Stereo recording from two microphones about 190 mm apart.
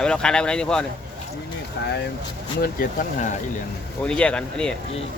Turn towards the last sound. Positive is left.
turn(degrees=5)  # may be behind; listen again after turning